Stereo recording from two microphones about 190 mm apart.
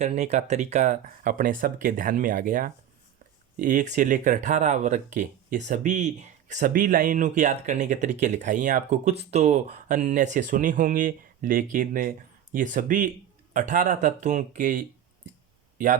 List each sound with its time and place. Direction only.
0.0 s speech: 35° right (ahead or behind)